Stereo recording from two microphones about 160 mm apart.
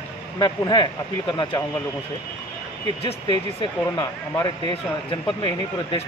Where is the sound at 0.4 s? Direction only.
25° left (ahead or behind).